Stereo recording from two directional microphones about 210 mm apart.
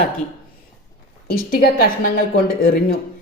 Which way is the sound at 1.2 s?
45° left (ahead or behind).